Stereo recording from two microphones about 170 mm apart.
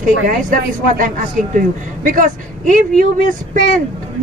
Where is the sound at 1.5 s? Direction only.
50° right (ahead or behind).